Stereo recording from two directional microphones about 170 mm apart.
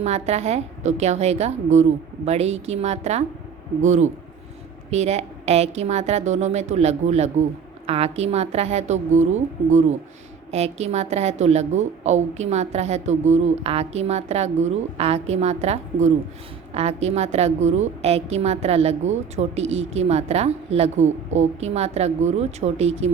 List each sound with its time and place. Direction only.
0.0 s a woman's voice: 40° right (ahead or behind)